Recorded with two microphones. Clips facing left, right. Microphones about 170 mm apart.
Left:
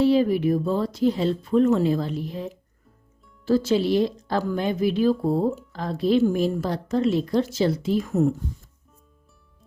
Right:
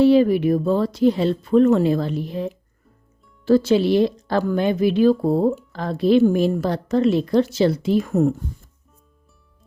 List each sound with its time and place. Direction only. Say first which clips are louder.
0.0 s speech: right 4 dB; 70° right (ahead or behind)